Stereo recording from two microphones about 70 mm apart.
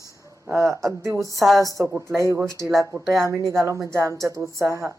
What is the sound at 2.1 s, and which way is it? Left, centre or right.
Speech, right.